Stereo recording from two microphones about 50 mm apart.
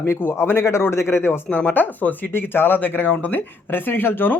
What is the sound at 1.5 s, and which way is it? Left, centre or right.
Speech, left.